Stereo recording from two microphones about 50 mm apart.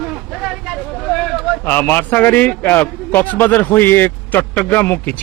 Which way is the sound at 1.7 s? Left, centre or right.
Left.